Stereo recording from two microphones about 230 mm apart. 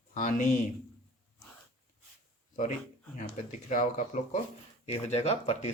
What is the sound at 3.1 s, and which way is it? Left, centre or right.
Speech, left.